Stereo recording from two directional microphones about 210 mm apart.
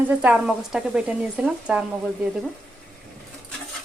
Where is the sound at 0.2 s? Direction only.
5° right (ahead or behind).